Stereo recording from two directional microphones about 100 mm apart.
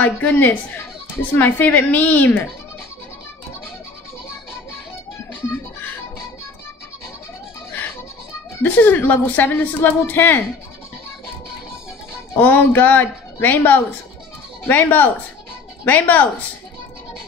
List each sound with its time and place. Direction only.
0.0 s speech: 15° left (ahead or behind)
8.6 s a woman's voice: 15° left (ahead or behind)
12.4 s a woman's voice: 20° left (ahead or behind)